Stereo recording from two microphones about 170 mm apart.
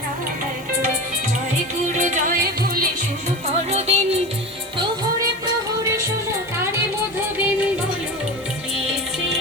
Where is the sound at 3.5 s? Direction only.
40° right (ahead or behind).